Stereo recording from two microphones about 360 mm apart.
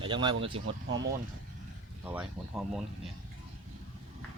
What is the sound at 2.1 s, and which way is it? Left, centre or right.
Speech, centre.